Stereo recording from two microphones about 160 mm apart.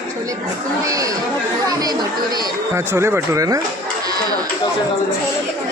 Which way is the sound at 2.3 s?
20° right (ahead or behind).